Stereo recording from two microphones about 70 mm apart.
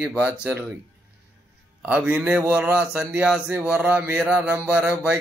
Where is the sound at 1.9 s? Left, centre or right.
Centre.